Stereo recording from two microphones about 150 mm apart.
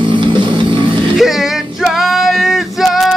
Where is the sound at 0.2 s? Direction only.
35° right (ahead or behind).